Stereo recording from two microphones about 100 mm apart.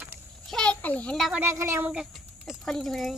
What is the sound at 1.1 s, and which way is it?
Speech, centre (ahead or behind).